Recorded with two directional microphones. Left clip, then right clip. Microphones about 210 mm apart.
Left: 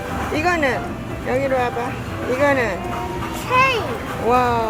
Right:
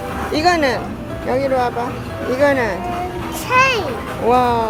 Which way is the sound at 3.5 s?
40° right (ahead or behind).